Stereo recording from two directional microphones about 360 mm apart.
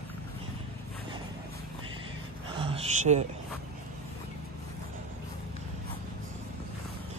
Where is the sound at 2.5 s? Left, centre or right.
Centre.